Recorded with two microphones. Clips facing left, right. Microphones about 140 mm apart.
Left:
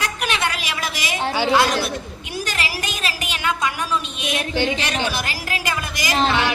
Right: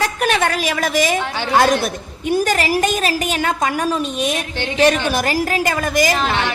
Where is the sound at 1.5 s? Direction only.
45° right (ahead or behind).